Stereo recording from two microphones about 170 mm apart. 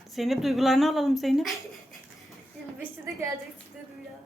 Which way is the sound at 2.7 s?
15° right (ahead or behind).